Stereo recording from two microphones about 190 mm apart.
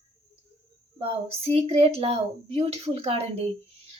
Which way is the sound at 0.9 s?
30° right (ahead or behind).